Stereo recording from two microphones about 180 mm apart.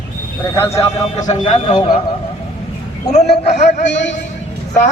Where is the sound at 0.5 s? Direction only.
15° left (ahead or behind).